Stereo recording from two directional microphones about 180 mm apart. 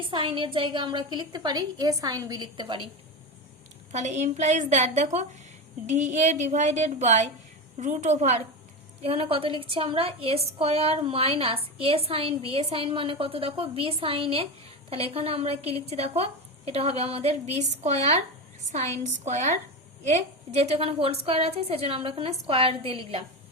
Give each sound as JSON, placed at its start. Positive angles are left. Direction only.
{"t": 0.0, "sound": "a woman's voice", "side_deg": -30}
{"t": 3.9, "sound": "a woman's voice", "side_deg": -40}
{"t": 19.2, "sound": "a woman's voice", "side_deg": -40}